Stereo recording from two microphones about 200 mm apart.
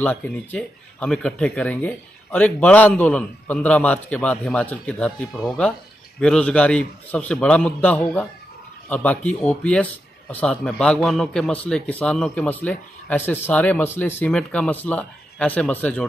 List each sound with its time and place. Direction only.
0.0 s speech: 10° left (ahead or behind)